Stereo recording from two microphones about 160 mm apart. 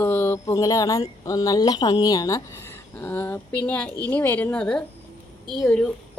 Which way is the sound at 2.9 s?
10° left (ahead or behind).